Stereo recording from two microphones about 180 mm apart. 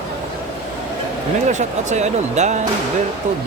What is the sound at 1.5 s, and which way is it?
Speech, 40° right (ahead or behind).